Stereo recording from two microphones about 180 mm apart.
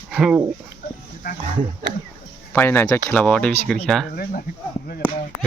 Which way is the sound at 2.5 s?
10° left (ahead or behind).